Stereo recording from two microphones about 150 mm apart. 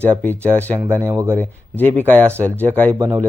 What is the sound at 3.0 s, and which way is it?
Speech, 30° right (ahead or behind).